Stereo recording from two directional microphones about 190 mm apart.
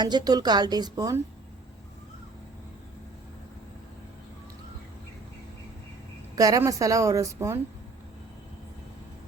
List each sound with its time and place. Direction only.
0.0 s a woman's voice: 20° right (ahead or behind)
6.3 s a woman's voice: 20° right (ahead or behind)